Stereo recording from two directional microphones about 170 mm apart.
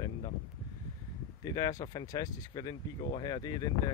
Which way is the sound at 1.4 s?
20° left (ahead or behind).